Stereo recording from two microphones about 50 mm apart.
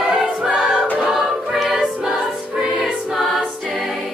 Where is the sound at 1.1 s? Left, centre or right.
Centre.